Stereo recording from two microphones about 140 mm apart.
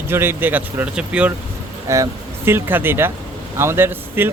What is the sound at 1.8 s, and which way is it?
Speech, 20° right (ahead or behind).